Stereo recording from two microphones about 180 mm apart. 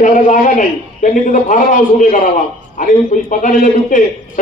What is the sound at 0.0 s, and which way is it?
A man's voice, 45° left (ahead or behind).